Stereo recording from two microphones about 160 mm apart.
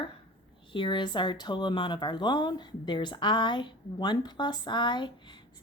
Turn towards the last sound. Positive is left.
turn(degrees=30)  # may be behind; listen again after turning